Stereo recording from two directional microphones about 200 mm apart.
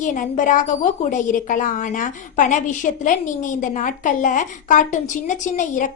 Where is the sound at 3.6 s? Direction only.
40° left (ahead or behind).